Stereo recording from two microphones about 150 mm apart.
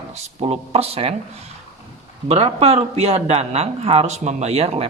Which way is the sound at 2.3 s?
45° right (ahead or behind).